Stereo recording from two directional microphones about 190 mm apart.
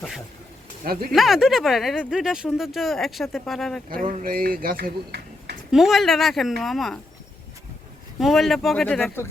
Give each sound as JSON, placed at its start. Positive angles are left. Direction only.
{"t": 1.1, "sound": "speech", "side_deg": 0}
{"t": 3.8, "sound": "speech", "side_deg": -50}
{"t": 5.7, "sound": "speech", "side_deg": 0}
{"t": 8.2, "sound": "speech", "side_deg": 0}